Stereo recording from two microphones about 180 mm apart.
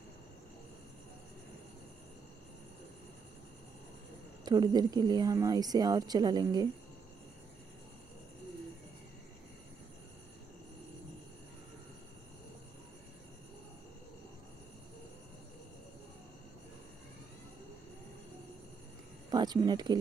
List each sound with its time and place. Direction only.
4.5 s speech: 20° right (ahead or behind)
19.3 s speech: 20° right (ahead or behind)